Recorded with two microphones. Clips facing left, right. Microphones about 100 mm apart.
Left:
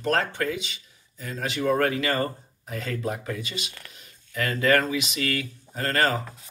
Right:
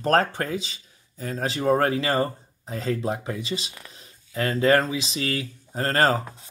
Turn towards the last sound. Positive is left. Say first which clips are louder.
# right 3 dB
turn(degrees=-30)  # may be behind; listen again after turning